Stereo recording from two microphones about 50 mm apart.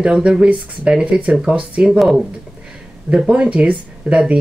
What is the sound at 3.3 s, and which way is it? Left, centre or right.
Speech, right.